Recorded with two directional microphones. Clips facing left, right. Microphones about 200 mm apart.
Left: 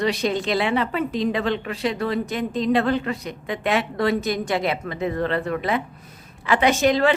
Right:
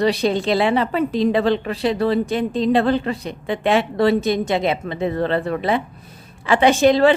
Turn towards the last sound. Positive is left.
turn(degrees=-30)  # may be behind; listen again after turning